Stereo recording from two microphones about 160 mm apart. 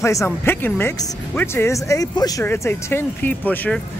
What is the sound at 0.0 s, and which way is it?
Speech, 20° left (ahead or behind).